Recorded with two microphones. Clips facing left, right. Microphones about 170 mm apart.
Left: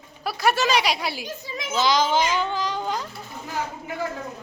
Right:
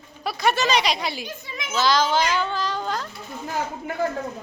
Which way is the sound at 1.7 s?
15° left (ahead or behind).